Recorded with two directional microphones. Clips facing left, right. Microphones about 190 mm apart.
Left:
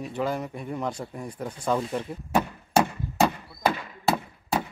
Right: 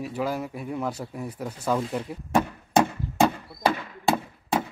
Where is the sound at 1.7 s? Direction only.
Centre (ahead or behind).